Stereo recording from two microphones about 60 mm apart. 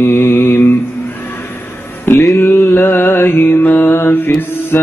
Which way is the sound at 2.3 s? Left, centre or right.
Left.